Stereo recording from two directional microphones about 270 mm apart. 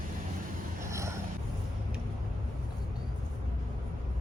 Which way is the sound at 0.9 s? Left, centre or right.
Centre.